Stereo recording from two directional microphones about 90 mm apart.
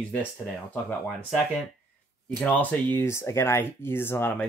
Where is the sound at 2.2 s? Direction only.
15° left (ahead or behind).